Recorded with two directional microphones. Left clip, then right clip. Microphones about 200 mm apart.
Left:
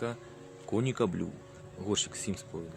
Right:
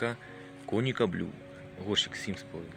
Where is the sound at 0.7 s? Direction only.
5° left (ahead or behind).